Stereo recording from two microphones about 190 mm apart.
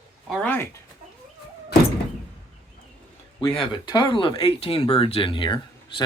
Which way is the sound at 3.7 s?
25° left (ahead or behind).